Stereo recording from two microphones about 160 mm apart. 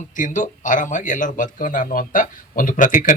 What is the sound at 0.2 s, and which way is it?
A man's voice, 55° left (ahead or behind).